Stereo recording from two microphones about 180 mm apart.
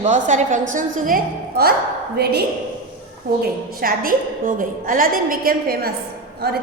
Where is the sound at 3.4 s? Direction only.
55° right (ahead or behind).